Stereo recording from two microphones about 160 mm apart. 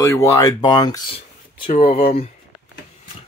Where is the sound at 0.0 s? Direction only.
15° left (ahead or behind).